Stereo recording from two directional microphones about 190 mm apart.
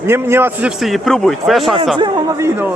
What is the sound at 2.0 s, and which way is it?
Speech, 15° right (ahead or behind).